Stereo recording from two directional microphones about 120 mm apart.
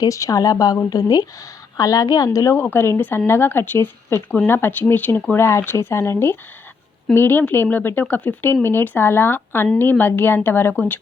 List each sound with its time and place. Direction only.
0.0 s a woman's voice: 30° left (ahead or behind)